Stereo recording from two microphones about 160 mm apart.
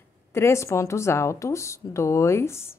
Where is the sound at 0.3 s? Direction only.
15° left (ahead or behind).